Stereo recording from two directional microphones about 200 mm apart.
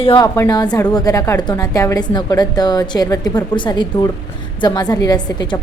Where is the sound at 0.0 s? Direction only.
25° left (ahead or behind).